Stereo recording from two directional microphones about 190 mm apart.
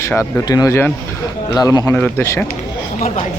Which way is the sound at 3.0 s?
35° left (ahead or behind).